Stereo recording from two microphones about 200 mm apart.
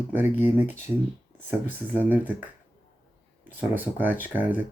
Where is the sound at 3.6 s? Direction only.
10° right (ahead or behind).